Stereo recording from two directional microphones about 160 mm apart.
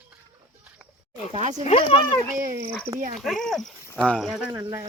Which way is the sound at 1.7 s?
35° left (ahead or behind).